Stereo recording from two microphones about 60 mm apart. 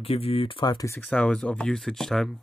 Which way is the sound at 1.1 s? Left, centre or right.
Centre.